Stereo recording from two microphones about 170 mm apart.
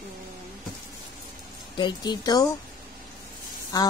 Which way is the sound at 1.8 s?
25° left (ahead or behind).